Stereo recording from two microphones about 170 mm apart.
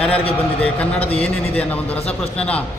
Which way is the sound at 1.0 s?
35° left (ahead or behind).